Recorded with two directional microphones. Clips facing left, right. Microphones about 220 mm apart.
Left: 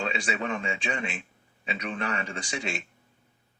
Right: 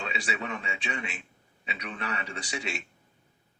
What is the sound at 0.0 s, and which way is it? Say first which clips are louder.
A man's voice: left 4 dB; 50° left (ahead or behind).